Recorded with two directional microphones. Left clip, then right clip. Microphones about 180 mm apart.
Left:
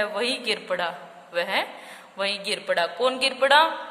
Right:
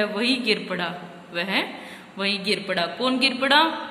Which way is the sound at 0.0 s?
55° left (ahead or behind).